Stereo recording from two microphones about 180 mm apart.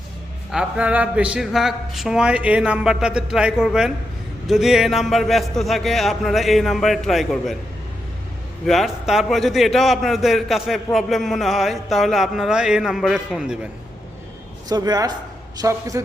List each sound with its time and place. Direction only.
0.5 s speech: 5° right (ahead or behind)
8.6 s speech: centre (ahead or behind)
14.7 s a man's voice: 20° right (ahead or behind)